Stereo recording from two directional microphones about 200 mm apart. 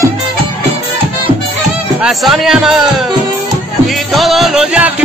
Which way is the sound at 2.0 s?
Centre (ahead or behind).